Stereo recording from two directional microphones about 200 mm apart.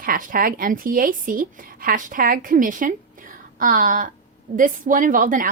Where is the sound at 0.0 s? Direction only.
45° right (ahead or behind).